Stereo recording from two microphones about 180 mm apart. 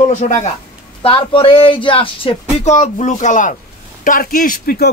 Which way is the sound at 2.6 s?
40° left (ahead or behind).